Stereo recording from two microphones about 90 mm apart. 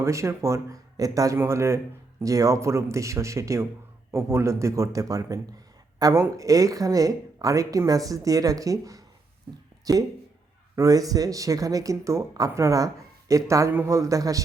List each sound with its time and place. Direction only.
0.0 s speech: 35° right (ahead or behind)